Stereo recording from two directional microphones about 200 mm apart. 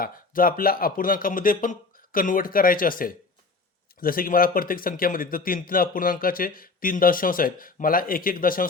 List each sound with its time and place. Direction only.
0.0 s a man's voice: 45° left (ahead or behind)